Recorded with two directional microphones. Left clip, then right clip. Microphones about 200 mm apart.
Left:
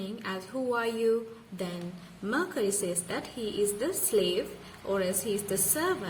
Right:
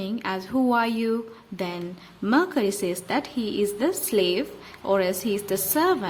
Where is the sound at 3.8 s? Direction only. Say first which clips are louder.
Right 5 dB; 40° right (ahead or behind).